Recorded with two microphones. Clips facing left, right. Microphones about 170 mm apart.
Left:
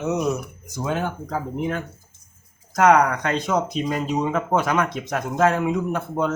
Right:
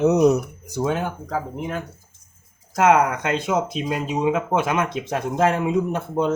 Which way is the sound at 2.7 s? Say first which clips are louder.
Left 1 dB; 25° right (ahead or behind).